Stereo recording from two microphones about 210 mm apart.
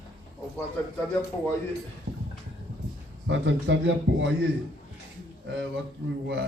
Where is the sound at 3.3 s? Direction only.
60° right (ahead or behind).